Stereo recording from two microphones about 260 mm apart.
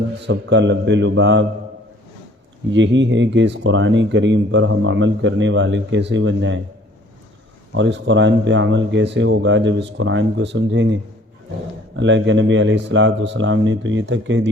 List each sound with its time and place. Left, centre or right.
0.2 s speech: right
2.7 s speech: right
7.7 s speech: right
11.9 s speech: right